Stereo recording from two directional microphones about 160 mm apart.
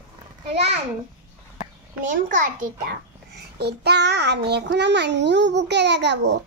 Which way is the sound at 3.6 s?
90° right.